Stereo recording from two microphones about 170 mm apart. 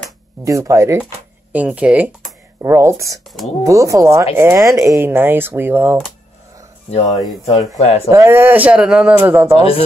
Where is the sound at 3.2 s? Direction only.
Centre (ahead or behind).